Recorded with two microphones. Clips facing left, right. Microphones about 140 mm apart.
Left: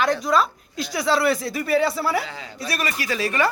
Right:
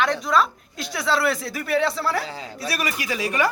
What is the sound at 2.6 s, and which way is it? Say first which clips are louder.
Speech: left 1 dB; 10° right (ahead or behind).